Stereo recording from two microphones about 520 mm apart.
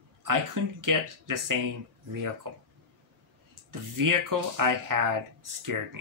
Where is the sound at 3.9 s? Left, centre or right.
Right.